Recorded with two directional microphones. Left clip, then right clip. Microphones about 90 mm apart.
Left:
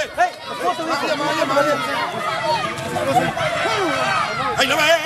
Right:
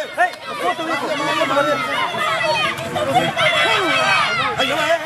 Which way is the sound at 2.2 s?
10° right (ahead or behind).